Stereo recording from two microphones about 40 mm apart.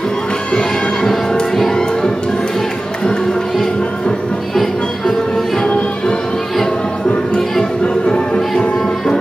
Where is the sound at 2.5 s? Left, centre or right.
Centre.